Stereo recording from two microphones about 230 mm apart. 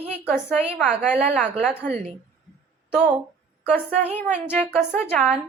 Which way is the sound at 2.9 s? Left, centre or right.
Centre.